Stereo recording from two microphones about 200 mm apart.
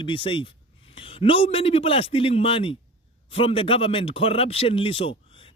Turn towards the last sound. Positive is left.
turn(degrees=25)  # may be behind; listen again after turning